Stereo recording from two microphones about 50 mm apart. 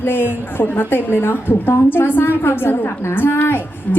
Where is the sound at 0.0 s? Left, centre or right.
Left.